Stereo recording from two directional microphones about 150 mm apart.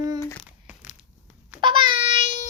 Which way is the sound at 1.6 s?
35° right (ahead or behind).